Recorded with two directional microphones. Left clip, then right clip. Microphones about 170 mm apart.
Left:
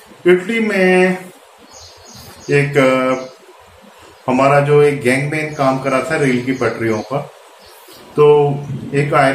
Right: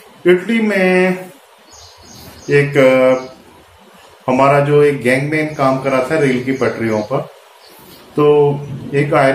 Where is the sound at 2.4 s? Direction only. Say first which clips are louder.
Right 2 dB; 15° right (ahead or behind).